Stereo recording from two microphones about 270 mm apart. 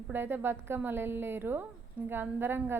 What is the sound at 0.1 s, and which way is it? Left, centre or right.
A woman's voice, centre.